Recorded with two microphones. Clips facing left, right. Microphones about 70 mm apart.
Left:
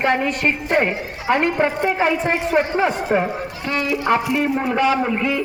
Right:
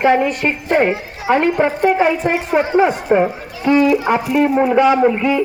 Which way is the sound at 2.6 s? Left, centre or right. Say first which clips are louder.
Right 6 dB; centre.